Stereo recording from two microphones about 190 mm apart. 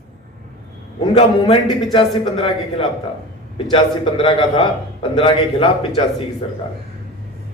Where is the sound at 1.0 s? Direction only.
25° left (ahead or behind).